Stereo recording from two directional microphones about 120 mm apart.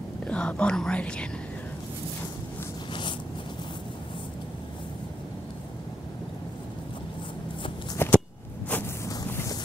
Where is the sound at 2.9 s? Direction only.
40° left (ahead or behind).